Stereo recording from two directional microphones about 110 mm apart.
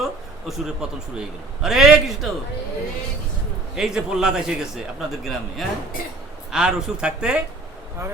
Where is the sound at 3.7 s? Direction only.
5° right (ahead or behind).